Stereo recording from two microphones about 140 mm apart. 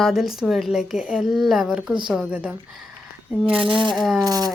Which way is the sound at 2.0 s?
5° right (ahead or behind).